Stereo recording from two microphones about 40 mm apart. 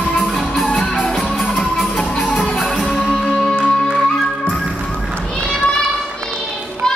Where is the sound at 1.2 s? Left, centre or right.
Centre.